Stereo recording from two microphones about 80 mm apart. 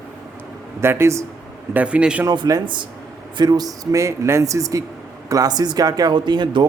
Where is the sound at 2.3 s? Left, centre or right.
Right.